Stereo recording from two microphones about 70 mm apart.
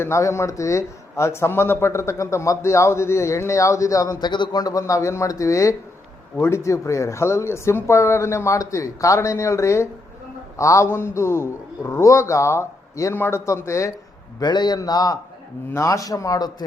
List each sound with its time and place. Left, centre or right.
0.0 s speech: left
4.2 s speech: left
10.8 s speech: left
14.4 s a man's voice: left
14.8 s speech: left
15.7 s speech: left